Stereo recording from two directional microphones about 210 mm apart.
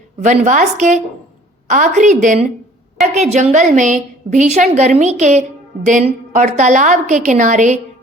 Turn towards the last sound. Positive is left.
turn(degrees=-35)  # may be behind; listen again after turning